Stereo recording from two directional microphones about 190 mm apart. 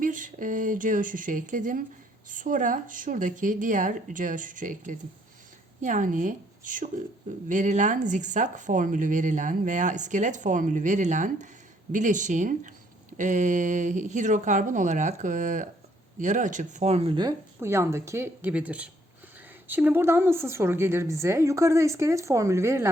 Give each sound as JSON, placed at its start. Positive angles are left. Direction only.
{"t": 0.0, "sound": "a woman's voice", "side_deg": -45}